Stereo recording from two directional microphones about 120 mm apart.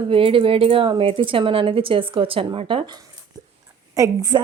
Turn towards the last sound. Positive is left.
turn(degrees=-35)  # may be behind; listen again after turning